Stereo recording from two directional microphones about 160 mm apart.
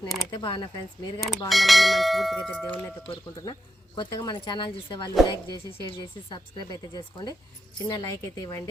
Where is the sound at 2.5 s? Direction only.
10° left (ahead or behind).